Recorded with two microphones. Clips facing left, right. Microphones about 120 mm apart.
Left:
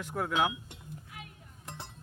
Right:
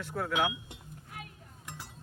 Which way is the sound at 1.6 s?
25° left (ahead or behind).